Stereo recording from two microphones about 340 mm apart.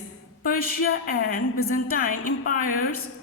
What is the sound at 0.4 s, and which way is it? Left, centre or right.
A woman's voice, left.